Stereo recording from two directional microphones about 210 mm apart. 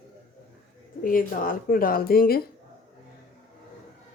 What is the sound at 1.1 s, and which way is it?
Speech, 40° left (ahead or behind).